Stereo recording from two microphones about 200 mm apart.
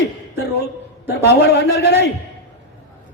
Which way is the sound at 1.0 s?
55° left (ahead or behind).